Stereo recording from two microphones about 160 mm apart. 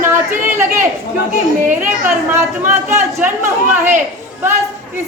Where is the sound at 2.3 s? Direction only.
15° right (ahead or behind).